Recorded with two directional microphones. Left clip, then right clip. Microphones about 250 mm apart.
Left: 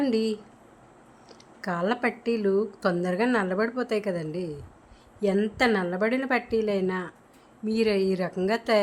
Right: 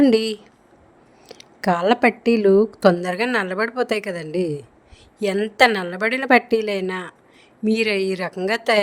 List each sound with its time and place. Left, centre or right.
0.0 s a woman's voice: right